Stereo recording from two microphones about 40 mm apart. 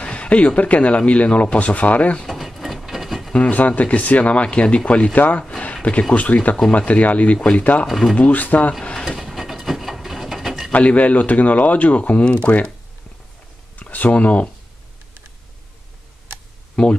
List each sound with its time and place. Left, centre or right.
0.0 s speech: left
2.2 s a sound: centre
3.3 s speech: left
5.6 s a sound: left
6.1 s speech: left
7.8 s speech: centre
8.2 s speech: left
8.9 s mechanisms: centre
9.2 s a sound: centre
10.7 s speech: left
13.7 s speech: left
16.8 s speech: centre